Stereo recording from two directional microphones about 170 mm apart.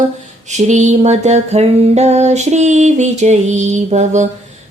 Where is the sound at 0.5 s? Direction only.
45° right (ahead or behind).